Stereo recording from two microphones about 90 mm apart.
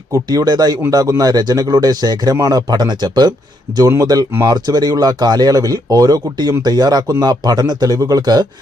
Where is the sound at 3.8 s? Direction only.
40° right (ahead or behind).